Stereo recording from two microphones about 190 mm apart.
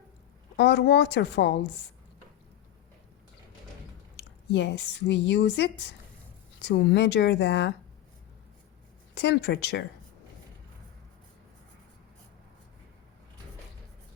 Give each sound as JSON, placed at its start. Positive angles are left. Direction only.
{"t": 0.5, "sound": "speech", "side_deg": 65}
{"t": 4.2, "sound": "speech", "side_deg": 65}
{"t": 9.1, "sound": "speech", "side_deg": 65}